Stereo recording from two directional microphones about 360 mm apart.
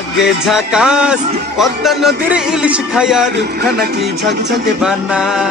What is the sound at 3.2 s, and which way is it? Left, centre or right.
Music, right.